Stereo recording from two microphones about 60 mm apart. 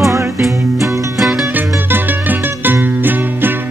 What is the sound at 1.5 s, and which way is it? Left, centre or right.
Music, right.